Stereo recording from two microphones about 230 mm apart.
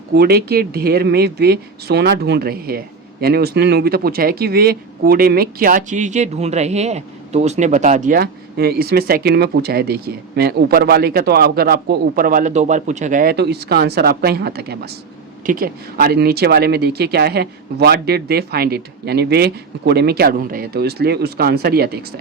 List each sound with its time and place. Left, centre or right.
0.1 s speech: right